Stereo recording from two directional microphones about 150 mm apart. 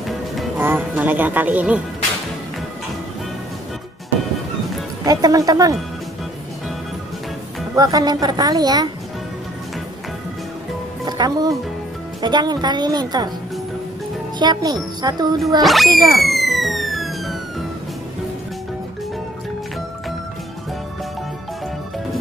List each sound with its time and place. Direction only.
0.6 s speech: 10° right (ahead or behind)
5.0 s a woman's voice: 25° right (ahead or behind)
7.7 s a woman's voice: 25° right (ahead or behind)
11.1 s a woman's voice: 25° right (ahead or behind)
14.4 s a woman's voice: 25° right (ahead or behind)
15.6 s speech: centre (ahead or behind)
16.2 s a sound: centre (ahead or behind)